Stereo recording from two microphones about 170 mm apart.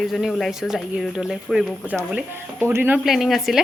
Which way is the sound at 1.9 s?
10° right (ahead or behind).